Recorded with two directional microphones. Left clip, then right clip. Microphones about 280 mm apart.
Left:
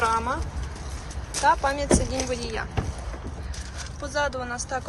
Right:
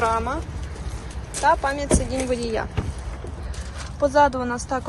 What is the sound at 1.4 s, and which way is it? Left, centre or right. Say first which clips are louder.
Speech: right 2 dB; centre.